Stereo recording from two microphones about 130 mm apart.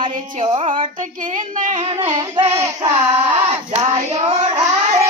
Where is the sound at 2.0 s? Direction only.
50° right (ahead or behind).